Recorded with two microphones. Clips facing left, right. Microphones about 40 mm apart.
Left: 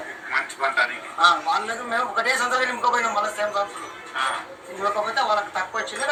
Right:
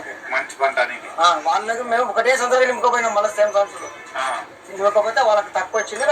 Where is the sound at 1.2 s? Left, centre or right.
Centre.